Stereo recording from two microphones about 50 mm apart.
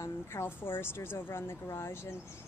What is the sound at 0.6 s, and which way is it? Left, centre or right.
Speech, left.